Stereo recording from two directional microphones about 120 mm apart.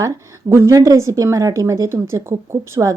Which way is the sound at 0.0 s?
25° right (ahead or behind).